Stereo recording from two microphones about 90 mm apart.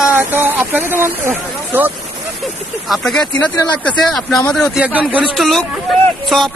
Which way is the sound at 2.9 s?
5° left (ahead or behind).